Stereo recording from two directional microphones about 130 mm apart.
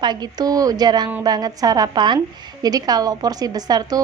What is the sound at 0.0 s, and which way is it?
A woman's voice, 30° right (ahead or behind).